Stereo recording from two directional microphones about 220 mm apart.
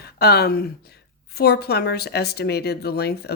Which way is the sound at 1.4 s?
45° left (ahead or behind).